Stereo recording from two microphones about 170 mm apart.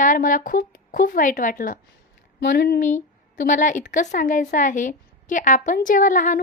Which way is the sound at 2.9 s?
50° left (ahead or behind).